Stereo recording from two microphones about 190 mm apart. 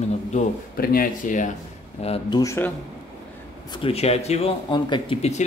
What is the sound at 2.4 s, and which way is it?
Speech, 15° left (ahead or behind).